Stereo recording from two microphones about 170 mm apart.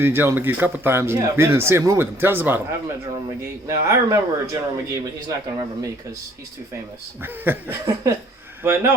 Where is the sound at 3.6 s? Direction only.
15° right (ahead or behind).